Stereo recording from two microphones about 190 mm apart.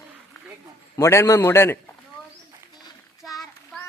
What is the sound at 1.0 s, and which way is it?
Speech, 15° left (ahead or behind).